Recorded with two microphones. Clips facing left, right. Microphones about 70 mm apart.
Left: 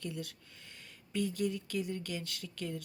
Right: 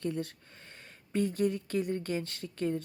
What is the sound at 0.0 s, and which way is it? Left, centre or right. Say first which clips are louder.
Speech: right 7 dB; right.